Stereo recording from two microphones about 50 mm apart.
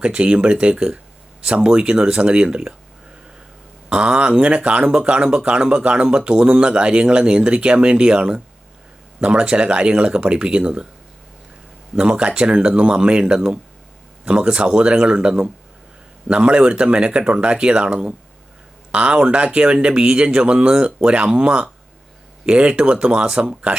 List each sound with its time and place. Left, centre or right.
0.0 s speech: right
3.8 s speech: right
11.9 s speech: right